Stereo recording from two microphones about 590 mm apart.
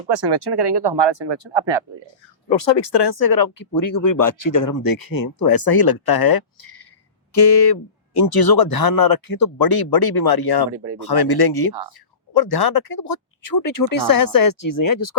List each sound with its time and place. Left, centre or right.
0.1 s speech: right
2.5 s speech: left